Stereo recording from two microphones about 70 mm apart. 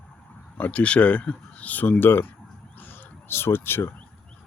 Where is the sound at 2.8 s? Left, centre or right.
Left.